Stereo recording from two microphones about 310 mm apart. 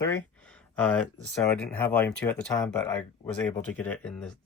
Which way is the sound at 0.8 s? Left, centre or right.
Centre.